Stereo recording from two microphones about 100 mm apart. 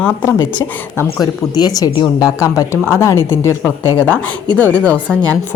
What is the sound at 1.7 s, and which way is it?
A woman's voice, 45° left (ahead or behind).